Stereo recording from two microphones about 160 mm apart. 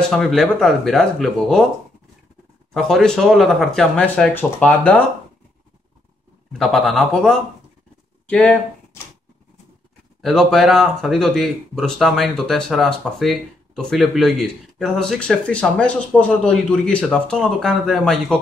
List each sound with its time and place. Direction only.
0.1 s speech: centre (ahead or behind)
2.7 s speech: centre (ahead or behind)
6.6 s speech: centre (ahead or behind)
10.2 s speech: centre (ahead or behind)